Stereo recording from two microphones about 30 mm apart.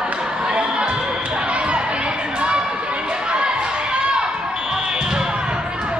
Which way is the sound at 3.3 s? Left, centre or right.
Right.